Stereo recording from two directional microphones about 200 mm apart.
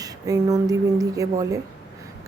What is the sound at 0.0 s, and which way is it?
Speech, 20° right (ahead or behind).